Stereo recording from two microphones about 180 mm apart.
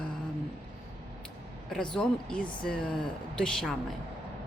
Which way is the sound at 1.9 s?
5° left (ahead or behind).